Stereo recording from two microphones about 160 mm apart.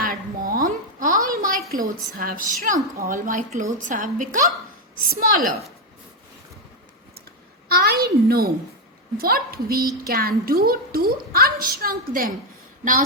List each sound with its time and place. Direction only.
0.0 s a sound: 60° right (ahead or behind)
1.7 s a woman's voice: 60° right (ahead or behind)
7.7 s a woman's voice: 70° right (ahead or behind)